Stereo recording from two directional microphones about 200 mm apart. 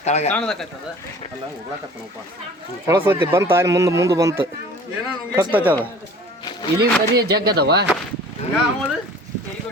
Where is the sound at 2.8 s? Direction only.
10° right (ahead or behind).